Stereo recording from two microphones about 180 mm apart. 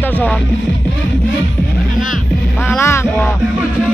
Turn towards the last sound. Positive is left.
turn(degrees=15)  # may be behind; listen again after turning